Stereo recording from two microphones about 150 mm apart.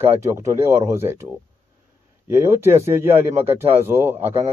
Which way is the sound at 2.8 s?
15° right (ahead or behind).